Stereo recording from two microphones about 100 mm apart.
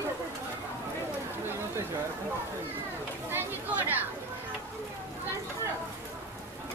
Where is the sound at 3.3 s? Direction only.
20° right (ahead or behind).